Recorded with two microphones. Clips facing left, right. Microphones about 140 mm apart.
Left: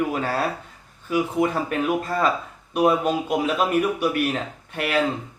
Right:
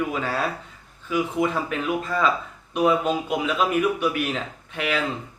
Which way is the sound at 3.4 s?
45° left (ahead or behind).